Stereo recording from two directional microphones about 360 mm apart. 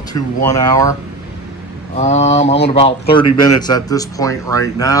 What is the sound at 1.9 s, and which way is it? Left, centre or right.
Speech, centre.